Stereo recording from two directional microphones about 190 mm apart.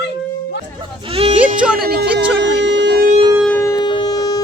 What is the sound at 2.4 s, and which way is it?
Music, 70° right (ahead or behind).